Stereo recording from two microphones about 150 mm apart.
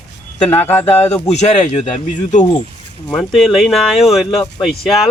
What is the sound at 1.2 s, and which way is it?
Speech, 50° left (ahead or behind).